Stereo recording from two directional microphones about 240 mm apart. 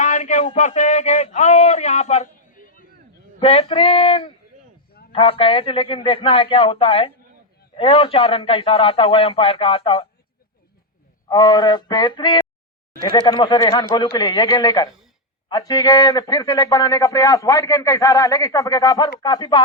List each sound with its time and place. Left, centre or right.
0.0 s a man's voice: left
11.3 s a man's voice: centre